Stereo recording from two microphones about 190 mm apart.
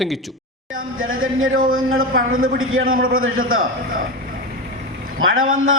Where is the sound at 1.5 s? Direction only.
50° right (ahead or behind).